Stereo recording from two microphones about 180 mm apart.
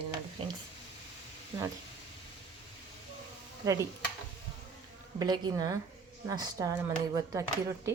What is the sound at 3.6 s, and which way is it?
Speech, 20° right (ahead or behind).